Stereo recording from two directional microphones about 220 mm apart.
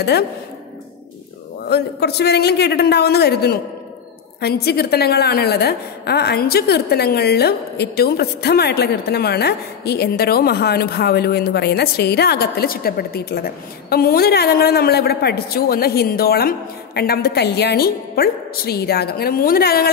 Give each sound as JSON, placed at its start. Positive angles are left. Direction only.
{"t": 1.7, "sound": "a woman's voice", "side_deg": 50}